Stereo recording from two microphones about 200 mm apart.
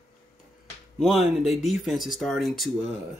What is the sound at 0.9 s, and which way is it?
Speech, centre (ahead or behind).